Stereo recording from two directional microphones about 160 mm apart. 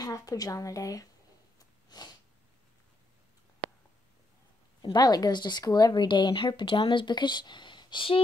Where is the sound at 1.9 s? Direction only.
25° left (ahead or behind).